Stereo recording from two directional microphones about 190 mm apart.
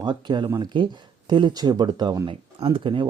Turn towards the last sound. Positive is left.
turn(degrees=-25)  # may be behind; listen again after turning